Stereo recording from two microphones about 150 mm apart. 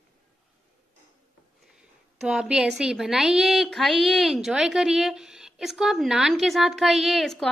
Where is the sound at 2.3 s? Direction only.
5° right (ahead or behind).